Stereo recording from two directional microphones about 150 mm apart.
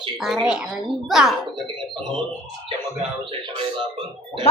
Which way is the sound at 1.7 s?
35° right (ahead or behind).